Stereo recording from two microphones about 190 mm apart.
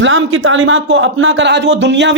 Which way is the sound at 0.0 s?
70° right (ahead or behind).